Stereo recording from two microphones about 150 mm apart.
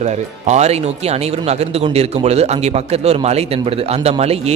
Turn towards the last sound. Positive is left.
turn(degrees=-45)  # may be behind; listen again after turning